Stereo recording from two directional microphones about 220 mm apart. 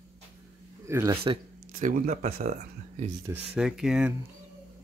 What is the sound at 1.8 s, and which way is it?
Speech, 35° right (ahead or behind).